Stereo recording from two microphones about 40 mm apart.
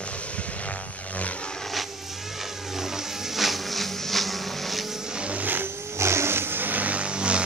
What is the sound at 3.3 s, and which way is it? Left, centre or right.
Music, centre.